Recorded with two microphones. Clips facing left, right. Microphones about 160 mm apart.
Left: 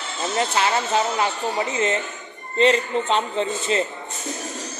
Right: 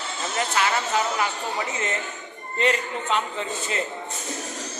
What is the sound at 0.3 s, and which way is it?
A man's voice, 25° left (ahead or behind).